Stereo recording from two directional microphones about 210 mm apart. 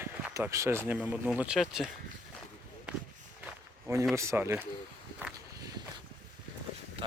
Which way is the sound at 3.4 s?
15° right (ahead or behind).